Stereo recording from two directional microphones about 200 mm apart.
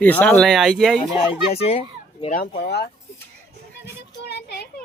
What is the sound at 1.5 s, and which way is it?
Speech, 30° left (ahead or behind).